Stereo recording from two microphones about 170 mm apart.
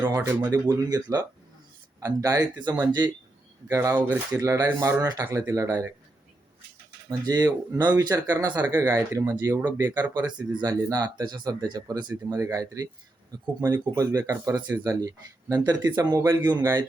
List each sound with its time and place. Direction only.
0.1 s speech: 25° right (ahead or behind)
7.3 s speech: 20° right (ahead or behind)
10.5 s speech: 20° right (ahead or behind)
16.4 s speech: 10° right (ahead or behind)